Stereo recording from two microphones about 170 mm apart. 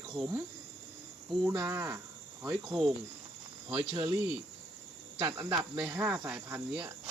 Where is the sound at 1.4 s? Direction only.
15° right (ahead or behind).